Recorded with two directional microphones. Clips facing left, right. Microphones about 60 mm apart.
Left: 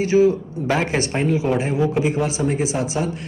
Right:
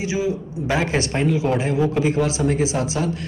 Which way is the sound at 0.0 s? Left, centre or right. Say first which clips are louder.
Left 8 dB; left.